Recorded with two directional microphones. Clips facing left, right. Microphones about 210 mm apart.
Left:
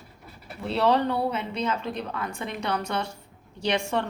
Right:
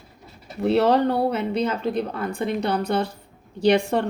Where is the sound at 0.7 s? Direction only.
45° right (ahead or behind).